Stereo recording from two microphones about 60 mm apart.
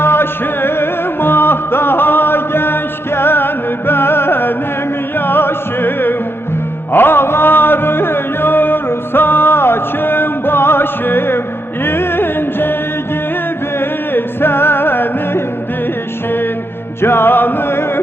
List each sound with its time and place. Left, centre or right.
0.0 s music: left
13.7 s music: left
17.0 s music: left